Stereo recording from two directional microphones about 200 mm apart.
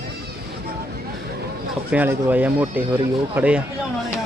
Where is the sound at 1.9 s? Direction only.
10° right (ahead or behind).